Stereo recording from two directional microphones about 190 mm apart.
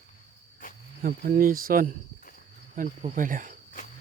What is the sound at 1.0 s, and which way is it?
Speech, 50° right (ahead or behind).